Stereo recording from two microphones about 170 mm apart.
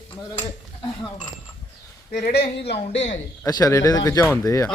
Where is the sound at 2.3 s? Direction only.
70° left (ahead or behind).